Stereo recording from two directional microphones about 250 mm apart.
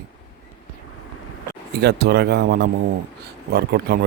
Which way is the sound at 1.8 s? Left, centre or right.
Right.